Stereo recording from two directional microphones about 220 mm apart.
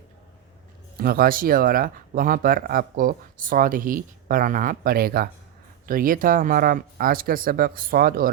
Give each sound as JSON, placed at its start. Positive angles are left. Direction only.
{"t": 0.9, "sound": "speech", "side_deg": -40}